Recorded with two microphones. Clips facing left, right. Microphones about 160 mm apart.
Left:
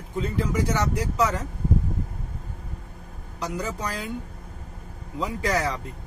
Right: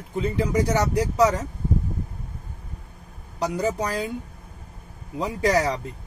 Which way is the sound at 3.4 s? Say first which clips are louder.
Right 6 dB; 35° right (ahead or behind).